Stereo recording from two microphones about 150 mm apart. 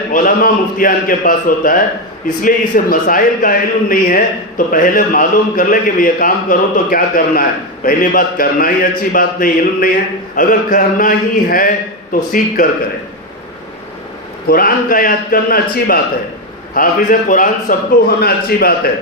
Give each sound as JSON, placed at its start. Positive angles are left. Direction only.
{"t": 0.1, "sound": "a man's voice", "side_deg": 65}
{"t": 14.4, "sound": "a man's voice", "side_deg": 75}
{"t": 18.2, "sound": "a man's voice", "side_deg": 90}